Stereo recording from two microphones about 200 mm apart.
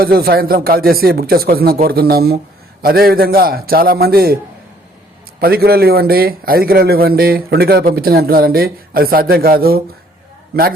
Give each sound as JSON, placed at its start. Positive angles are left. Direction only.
{"t": 0.0, "sound": "a man's voice", "side_deg": -50}
{"t": 5.4, "sound": "a man's voice", "side_deg": -50}